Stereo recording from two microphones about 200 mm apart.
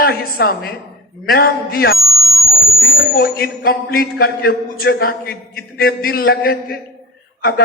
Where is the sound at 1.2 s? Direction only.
50° left (ahead or behind).